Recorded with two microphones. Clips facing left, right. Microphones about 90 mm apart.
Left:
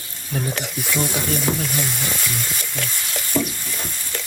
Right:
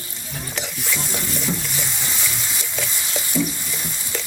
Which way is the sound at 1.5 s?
60° left (ahead or behind).